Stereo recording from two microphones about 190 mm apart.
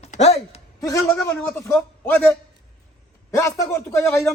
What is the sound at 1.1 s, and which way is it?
Speech, 10° left (ahead or behind).